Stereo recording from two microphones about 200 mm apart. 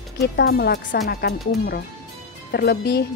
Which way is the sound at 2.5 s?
55° left (ahead or behind).